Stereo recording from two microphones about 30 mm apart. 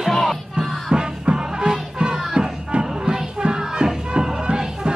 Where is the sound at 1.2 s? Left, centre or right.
Right.